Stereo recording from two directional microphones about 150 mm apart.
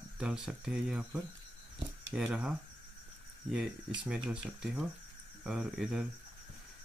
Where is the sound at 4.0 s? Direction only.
5° right (ahead or behind).